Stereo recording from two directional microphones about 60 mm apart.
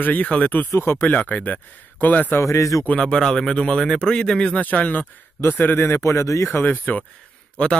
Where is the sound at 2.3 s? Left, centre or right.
Left.